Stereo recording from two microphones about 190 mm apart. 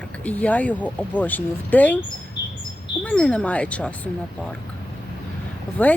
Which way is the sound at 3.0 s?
5° left (ahead or behind).